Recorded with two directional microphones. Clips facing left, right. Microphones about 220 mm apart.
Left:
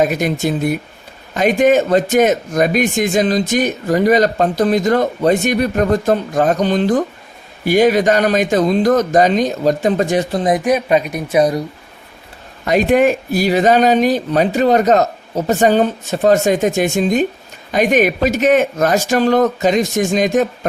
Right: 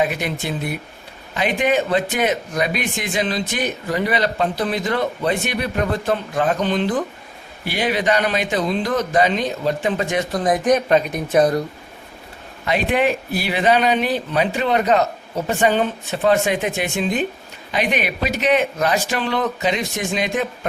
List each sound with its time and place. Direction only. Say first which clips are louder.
0.0 s a man's voice: left 6 dB; 45° left (ahead or behind)
10.7 s speech: left 1 dB; 10° left (ahead or behind)
12.6 s a man's voice: left 6 dB; 45° left (ahead or behind)